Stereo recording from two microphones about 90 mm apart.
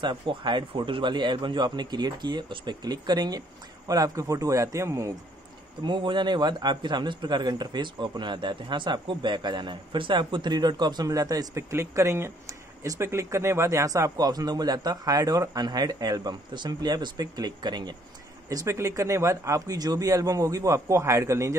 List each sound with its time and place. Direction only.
0.0 s a man's voice: 60° right (ahead or behind); by 5.1 s 35° right (ahead or behind)
5.8 s a man's voice: 65° right (ahead or behind)
18.5 s speech: 35° right (ahead or behind)